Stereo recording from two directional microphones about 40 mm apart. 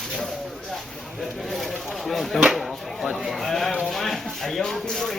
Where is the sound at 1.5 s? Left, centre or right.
Centre.